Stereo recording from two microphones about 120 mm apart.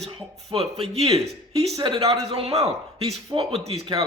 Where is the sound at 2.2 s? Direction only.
55° right (ahead or behind).